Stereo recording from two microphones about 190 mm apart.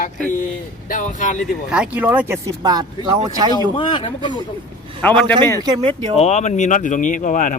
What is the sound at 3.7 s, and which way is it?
Speech, 25° left (ahead or behind).